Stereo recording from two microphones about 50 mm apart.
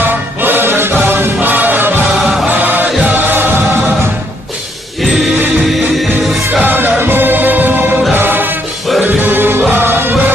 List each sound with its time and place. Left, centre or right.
0.0 s music: right
6.6 s music: right